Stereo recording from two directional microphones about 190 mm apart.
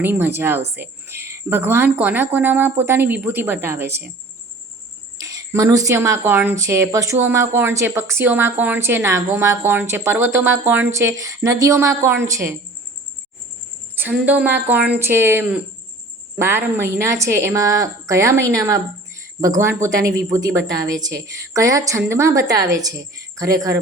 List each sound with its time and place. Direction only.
0.0 s a woman's voice: 10° right (ahead or behind)
5.1 s a woman's voice: 20° right (ahead or behind)
13.9 s a woman's voice: 10° right (ahead or behind)